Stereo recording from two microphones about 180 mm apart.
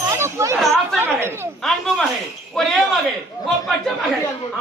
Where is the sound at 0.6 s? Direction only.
Centre (ahead or behind).